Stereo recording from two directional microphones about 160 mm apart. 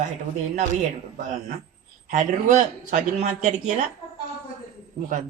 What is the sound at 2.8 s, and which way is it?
A man's voice, 50° right (ahead or behind).